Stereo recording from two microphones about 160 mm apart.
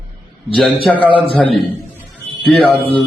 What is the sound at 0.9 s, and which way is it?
Speech, 35° left (ahead or behind).